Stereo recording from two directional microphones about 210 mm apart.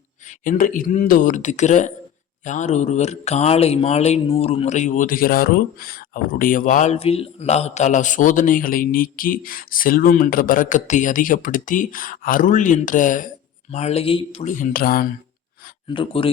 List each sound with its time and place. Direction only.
0.3 s speech: 35° left (ahead or behind)
15.9 s speech: 25° left (ahead or behind)